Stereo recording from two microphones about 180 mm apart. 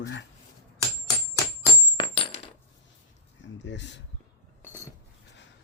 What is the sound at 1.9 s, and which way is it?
Coin, 30° left (ahead or behind).